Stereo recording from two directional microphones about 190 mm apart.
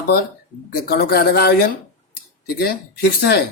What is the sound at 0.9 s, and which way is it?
Speech, 55° left (ahead or behind).